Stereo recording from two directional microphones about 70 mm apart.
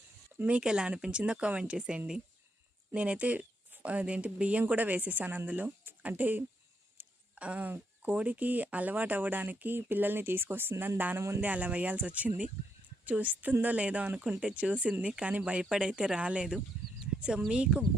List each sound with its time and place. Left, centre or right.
0.4 s speech: centre